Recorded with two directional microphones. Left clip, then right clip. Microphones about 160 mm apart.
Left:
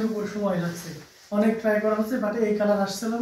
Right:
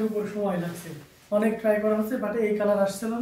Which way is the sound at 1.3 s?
25° right (ahead or behind).